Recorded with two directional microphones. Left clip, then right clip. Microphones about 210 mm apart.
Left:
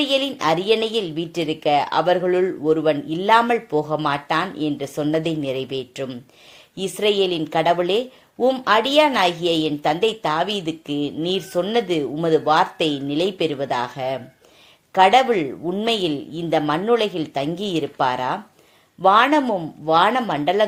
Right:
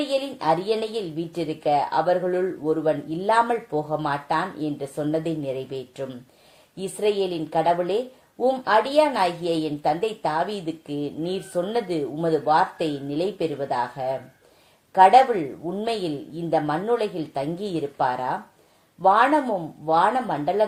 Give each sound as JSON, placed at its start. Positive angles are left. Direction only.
{"t": 0.1, "sound": "a woman's voice", "side_deg": 25}